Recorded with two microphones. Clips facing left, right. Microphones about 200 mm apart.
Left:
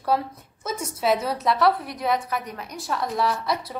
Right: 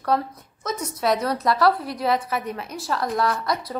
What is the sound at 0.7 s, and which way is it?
Speech, 25° left (ahead or behind).